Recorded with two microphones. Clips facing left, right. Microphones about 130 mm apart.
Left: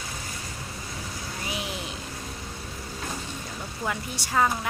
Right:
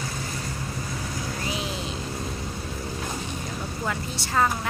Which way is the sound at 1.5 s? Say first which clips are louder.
Right 1 dB; 15° left (ahead or behind).